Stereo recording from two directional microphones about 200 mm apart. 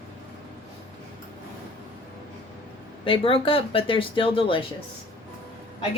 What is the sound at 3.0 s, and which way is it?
Speech, 25° left (ahead or behind).